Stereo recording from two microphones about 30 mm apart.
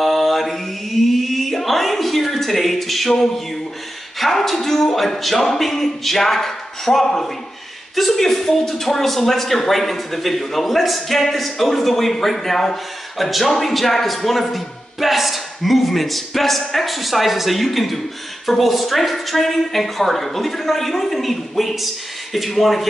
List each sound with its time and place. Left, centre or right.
0.0 s chant: centre
3.1 s speech: centre